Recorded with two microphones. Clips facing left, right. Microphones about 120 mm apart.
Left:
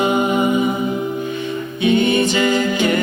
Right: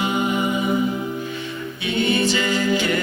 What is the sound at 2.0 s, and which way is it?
A capella, 20° left (ahead or behind).